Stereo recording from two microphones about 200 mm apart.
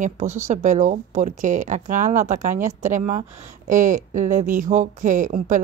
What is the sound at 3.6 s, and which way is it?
Speech, 40° right (ahead or behind).